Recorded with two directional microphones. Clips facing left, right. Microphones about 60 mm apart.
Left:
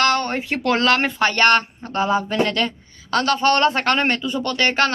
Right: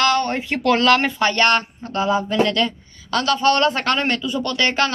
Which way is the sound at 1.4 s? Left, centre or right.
Left.